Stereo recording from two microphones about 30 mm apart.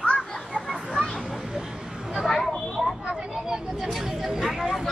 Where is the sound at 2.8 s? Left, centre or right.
Centre.